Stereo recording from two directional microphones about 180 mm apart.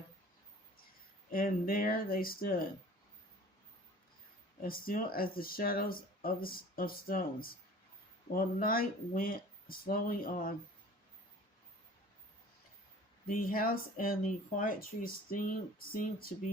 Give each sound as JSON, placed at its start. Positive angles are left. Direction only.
{"t": 1.3, "sound": "speech", "side_deg": 55}
{"t": 4.6, "sound": "speech", "side_deg": 55}
{"t": 13.2, "sound": "speech", "side_deg": 50}